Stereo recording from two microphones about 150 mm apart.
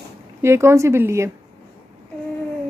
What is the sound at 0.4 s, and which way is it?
Speech, 15° right (ahead or behind).